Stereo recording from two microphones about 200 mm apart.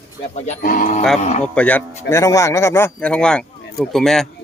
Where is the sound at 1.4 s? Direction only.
5° left (ahead or behind).